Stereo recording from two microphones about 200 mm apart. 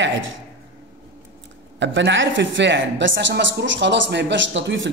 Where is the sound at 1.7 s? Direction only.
65° right (ahead or behind).